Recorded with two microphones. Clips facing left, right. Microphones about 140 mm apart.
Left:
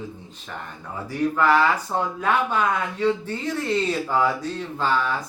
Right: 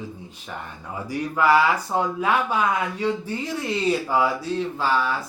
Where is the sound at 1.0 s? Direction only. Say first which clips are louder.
Even; 10° right (ahead or behind).